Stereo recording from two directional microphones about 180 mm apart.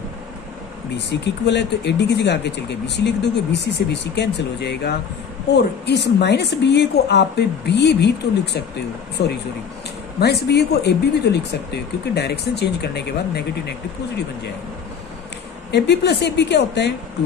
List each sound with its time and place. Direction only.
0.9 s a woman's voice: 75° left (ahead or behind)
9.2 s speech: 60° left (ahead or behind)
15.7 s a woman's voice: 70° left (ahead or behind)